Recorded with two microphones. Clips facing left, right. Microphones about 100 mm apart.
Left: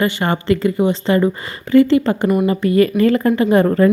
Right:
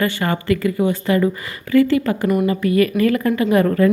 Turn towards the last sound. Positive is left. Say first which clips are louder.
# left 2 dB
turn(degrees=30)  # may be behind; listen again after turning